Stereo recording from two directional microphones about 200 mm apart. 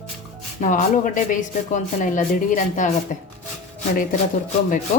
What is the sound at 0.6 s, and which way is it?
Speech, 40° left (ahead or behind).